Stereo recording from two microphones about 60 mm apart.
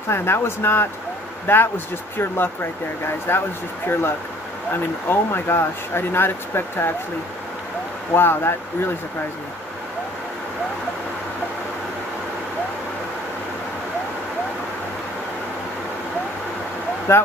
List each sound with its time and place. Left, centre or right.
0.1 s speech: left
8.1 s speech: left
17.1 s speech: left